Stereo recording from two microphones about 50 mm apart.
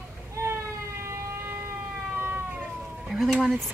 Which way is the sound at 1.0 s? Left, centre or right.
Right.